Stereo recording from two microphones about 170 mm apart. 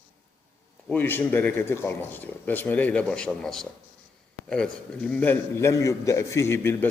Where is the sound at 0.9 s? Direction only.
10° left (ahead or behind).